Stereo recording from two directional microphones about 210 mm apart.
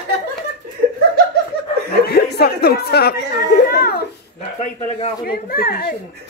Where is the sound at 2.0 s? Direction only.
50° left (ahead or behind).